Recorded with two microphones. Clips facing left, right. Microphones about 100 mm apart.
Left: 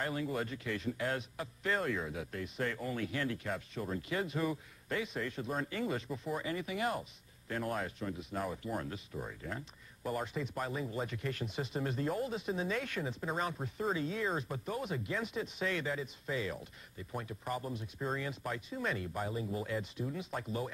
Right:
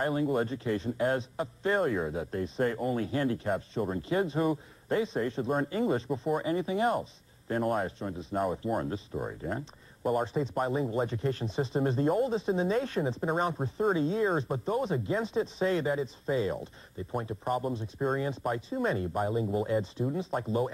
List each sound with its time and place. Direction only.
0.0 s speech: 35° right (ahead or behind)